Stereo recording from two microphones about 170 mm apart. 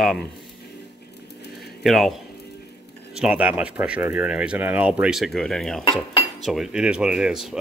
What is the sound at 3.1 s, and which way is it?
A man's voice, 5° right (ahead or behind).